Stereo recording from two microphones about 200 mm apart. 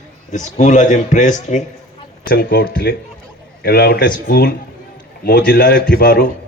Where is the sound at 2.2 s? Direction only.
50° left (ahead or behind).